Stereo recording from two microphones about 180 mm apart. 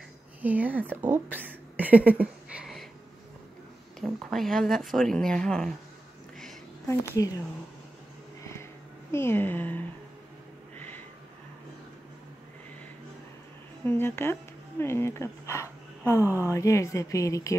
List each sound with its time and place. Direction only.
0.4 s a woman's voice: 10° right (ahead or behind)
4.0 s speech: centre (ahead or behind)
6.9 s speech: 20° left (ahead or behind)
9.1 s speech: 15° left (ahead or behind)
13.8 s speech: 10° left (ahead or behind)